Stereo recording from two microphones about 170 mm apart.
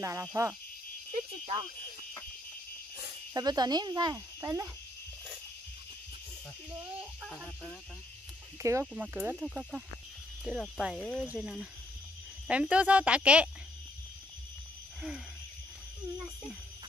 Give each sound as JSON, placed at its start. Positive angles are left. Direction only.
{"t": 0.0, "sound": "speech", "side_deg": -20}
{"t": 1.4, "sound": "speech", "side_deg": -35}
{"t": 3.3, "sound": "speech", "side_deg": -25}
{"t": 6.8, "sound": "speech", "side_deg": -5}
{"t": 8.5, "sound": "speech", "side_deg": -15}
{"t": 15.0, "sound": "a sound", "side_deg": 0}